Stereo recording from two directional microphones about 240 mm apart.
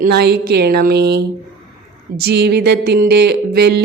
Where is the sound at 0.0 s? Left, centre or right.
Right.